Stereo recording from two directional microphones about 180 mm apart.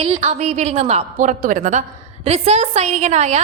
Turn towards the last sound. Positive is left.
turn(degrees=-40)  # may be behind; listen again after turning